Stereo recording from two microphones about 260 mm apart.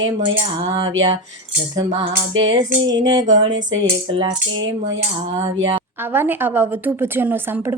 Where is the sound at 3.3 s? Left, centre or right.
Right.